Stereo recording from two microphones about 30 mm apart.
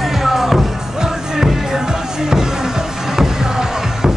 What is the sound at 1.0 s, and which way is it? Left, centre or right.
Music, right.